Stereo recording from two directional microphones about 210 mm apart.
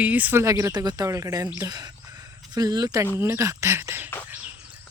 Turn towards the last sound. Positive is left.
turn(degrees=-10)  # may be behind; listen again after turning